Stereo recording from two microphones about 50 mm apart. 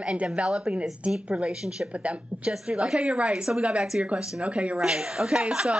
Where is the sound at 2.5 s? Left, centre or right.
Centre.